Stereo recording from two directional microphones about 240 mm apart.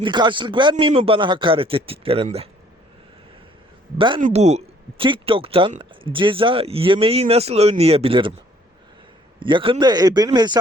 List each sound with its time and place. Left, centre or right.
0.0 s speech: centre
3.9 s speech: right
9.4 s speech: right